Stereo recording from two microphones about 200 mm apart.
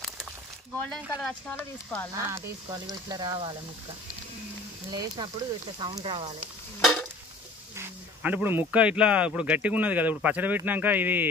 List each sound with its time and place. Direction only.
0.8 s speech: 5° left (ahead or behind)
2.3 s speech: 20° right (ahead or behind)
4.9 s speech: 20° right (ahead or behind)
6.8 s a sound: centre (ahead or behind)
7.7 s speech: 10° right (ahead or behind)